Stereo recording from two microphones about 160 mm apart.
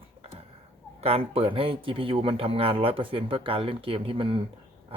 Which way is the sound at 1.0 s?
35° right (ahead or behind).